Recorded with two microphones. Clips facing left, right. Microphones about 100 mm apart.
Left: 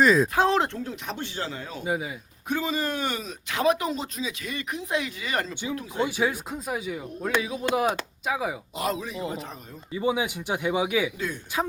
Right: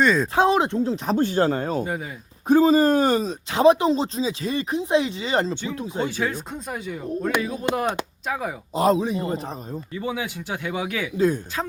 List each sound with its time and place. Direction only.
0.0 s speech: 5° left (ahead or behind)
0.3 s speech: 15° right (ahead or behind)
1.0 s speech: 45° right (ahead or behind)
1.8 s speech: 5° left (ahead or behind)
2.5 s speech: 35° right (ahead or behind)
6.0 s speech: 15° left (ahead or behind)
7.6 s speech: 20° right (ahead or behind)
8.3 s speech: 5° left (ahead or behind)
8.7 s speech: 35° right (ahead or behind)
9.9 s speech: 15° left (ahead or behind)